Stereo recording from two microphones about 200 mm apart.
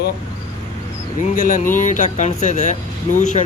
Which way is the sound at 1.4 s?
45° left (ahead or behind).